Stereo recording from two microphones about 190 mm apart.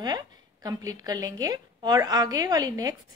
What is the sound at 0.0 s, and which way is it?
A woman's voice, 20° right (ahead or behind).